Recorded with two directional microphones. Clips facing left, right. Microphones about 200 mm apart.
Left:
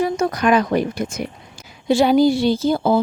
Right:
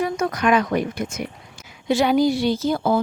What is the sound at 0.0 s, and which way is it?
A woman's voice, 30° left (ahead or behind).